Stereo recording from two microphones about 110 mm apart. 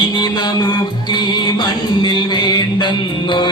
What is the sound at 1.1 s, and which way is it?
Music, 45° left (ahead or behind).